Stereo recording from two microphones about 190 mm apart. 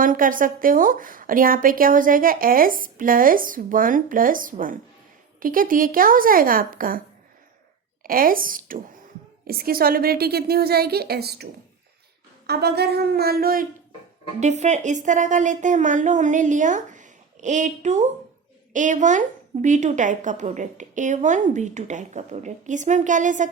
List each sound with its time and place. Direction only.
0.0 s a woman's voice: 45° right (ahead or behind)
8.0 s a woman's voice: 50° right (ahead or behind)
12.5 s a woman's voice: 60° right (ahead or behind)
14.3 s a woman's voice: 35° right (ahead or behind)